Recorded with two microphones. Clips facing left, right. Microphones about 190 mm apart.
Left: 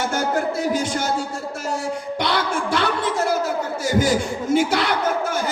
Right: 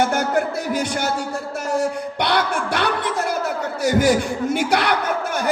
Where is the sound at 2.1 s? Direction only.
60° right (ahead or behind).